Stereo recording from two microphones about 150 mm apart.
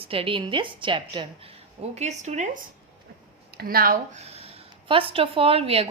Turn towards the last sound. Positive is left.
turn(degrees=-40)  # may be behind; listen again after turning